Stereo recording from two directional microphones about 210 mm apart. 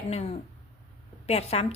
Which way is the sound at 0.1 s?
30° left (ahead or behind).